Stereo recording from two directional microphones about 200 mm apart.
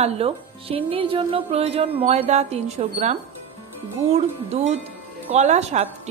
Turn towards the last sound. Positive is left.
turn(degrees=-35)  # may be behind; listen again after turning